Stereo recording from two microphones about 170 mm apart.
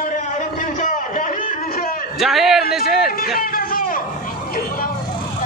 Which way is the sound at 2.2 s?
Centre (ahead or behind).